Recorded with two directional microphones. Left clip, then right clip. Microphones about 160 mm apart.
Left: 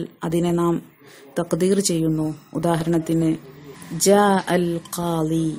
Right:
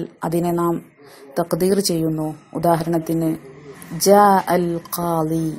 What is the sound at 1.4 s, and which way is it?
A woman's voice, 10° left (ahead or behind).